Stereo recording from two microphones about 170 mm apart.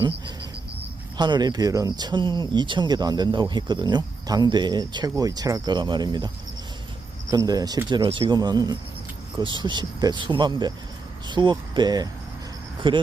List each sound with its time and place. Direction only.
1.1 s speech: 25° right (ahead or behind)